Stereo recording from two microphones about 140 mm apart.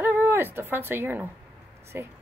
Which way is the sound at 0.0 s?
15° right (ahead or behind).